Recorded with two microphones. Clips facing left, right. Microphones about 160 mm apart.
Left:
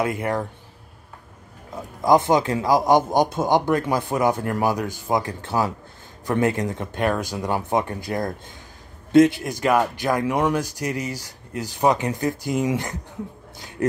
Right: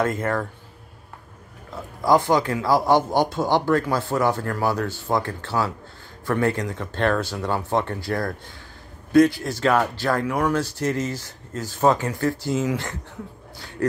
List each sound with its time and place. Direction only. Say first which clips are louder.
0.0 s speech: even; 10° left (ahead or behind)
1.7 s speech: left 1 dB; 20° left (ahead or behind)